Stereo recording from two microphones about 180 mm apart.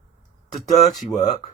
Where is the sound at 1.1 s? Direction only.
40° left (ahead or behind).